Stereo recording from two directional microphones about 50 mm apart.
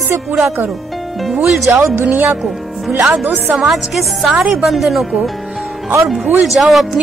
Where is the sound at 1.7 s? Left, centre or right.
Right.